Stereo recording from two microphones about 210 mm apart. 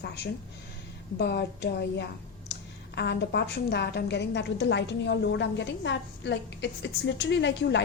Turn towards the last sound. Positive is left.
turn(degrees=55)  # may be behind; listen again after turning